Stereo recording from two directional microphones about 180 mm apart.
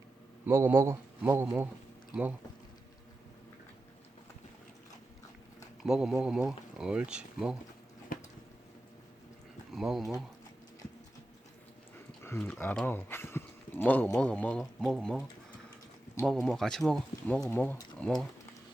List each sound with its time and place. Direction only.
0.4 s speech: 15° right (ahead or behind)
5.8 s speech: 5° right (ahead or behind)
8.1 s a sound: 50° left (ahead or behind)
9.7 s speech: centre (ahead or behind)
12.2 s speech: 10° left (ahead or behind)
16.2 s speech: centre (ahead or behind)